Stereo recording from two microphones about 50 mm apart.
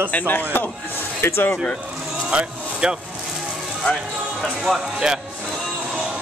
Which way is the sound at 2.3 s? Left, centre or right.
Centre.